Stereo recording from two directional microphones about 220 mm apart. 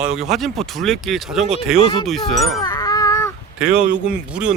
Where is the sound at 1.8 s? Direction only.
25° left (ahead or behind).